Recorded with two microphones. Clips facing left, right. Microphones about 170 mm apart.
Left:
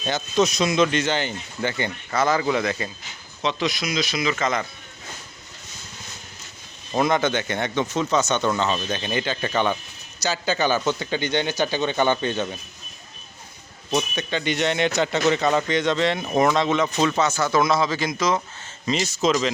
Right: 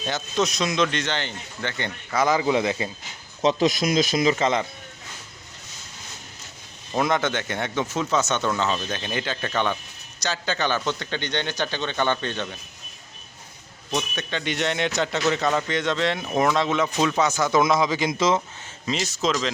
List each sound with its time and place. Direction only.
0.0 s speech: centre (ahead or behind)
2.1 s speech: 15° right (ahead or behind)
3.4 s speech: 45° right (ahead or behind)
4.4 s speech: 25° right (ahead or behind)
6.9 s speech: centre (ahead or behind)
13.9 s speech: centre (ahead or behind); by 18.3 s 25° right (ahead or behind)
18.9 s speech: centre (ahead or behind)